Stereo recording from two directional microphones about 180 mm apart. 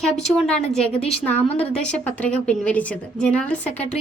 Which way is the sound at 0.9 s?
35° left (ahead or behind).